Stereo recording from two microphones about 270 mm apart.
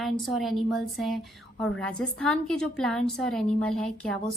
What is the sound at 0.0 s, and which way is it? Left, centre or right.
A woman's voice, centre.